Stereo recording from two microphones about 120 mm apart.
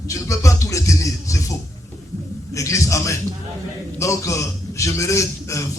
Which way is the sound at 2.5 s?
25° left (ahead or behind).